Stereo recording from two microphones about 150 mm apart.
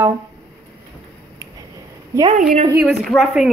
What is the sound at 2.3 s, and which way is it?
Speech, 65° right (ahead or behind).